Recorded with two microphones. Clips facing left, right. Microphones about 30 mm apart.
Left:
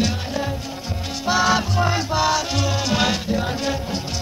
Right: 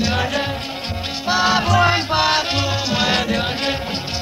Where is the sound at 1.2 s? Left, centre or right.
Right.